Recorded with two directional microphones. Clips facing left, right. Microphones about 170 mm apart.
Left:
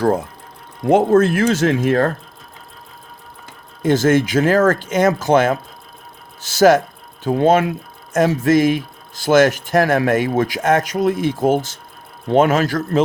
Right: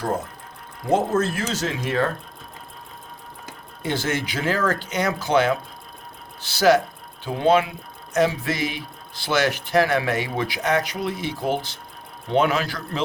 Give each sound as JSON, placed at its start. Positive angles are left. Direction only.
{"t": 0.9, "sound": "speech", "side_deg": 60}
{"t": 3.4, "sound": "speech", "side_deg": 45}